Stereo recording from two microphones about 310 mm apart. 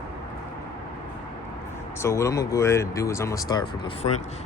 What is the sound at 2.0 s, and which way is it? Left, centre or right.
Speech, centre.